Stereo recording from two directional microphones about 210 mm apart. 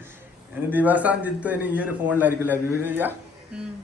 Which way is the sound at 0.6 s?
10° right (ahead or behind).